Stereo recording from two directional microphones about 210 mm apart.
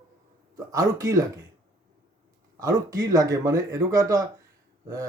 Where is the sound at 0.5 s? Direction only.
15° right (ahead or behind).